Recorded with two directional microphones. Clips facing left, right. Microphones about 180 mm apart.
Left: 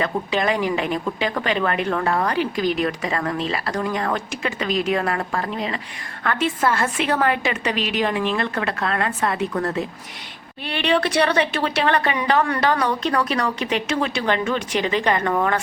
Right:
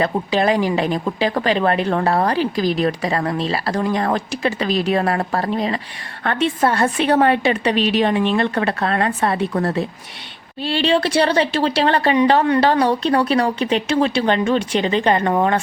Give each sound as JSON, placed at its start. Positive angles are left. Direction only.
{"t": 0.0, "sound": "speech", "side_deg": -35}